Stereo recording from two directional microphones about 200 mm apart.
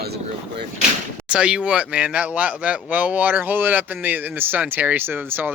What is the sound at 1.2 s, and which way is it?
A man's voice, 5° right (ahead or behind).